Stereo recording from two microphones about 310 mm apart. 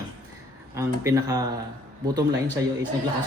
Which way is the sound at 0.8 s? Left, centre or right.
Centre.